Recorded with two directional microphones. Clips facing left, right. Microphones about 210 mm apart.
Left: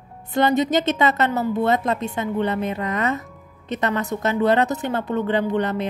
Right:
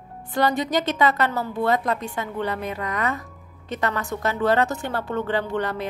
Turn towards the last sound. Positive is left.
turn(degrees=20)  # may be behind; listen again after turning